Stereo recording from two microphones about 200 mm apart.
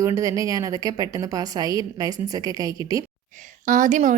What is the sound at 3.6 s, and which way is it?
Speech, 40° right (ahead or behind).